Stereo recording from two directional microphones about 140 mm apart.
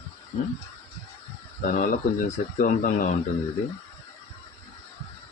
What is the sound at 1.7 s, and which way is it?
Speech, 65° left (ahead or behind).